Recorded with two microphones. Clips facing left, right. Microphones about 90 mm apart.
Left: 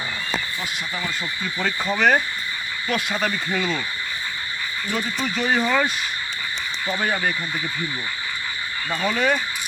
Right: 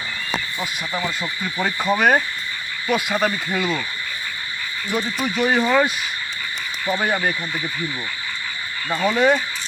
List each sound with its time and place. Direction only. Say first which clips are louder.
0.6 s speech: right 3 dB; 20° right (ahead or behind)
4.9 s speech: right 3 dB; 10° right (ahead or behind)
9.0 s speech: right 4 dB; 10° right (ahead or behind)